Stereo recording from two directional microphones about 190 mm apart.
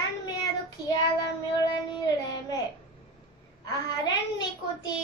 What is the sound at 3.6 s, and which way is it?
Speech, 20° left (ahead or behind).